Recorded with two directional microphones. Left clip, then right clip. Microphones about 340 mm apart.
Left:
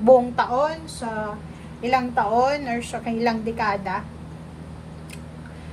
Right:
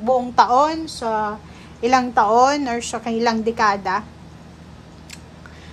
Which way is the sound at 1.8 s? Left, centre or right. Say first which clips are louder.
Right 5 dB; centre.